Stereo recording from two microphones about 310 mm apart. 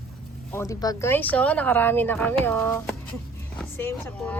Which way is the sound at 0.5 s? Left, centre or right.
Centre.